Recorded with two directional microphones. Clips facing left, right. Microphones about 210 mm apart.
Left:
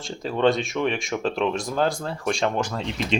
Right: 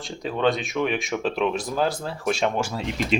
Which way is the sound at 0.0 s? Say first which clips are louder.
Left 2 dB; centre (ahead or behind).